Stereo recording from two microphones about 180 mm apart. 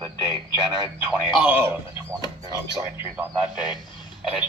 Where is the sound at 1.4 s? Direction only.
10° right (ahead or behind).